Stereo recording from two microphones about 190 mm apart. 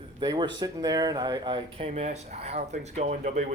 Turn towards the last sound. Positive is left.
turn(degrees=-40)  # may be behind; listen again after turning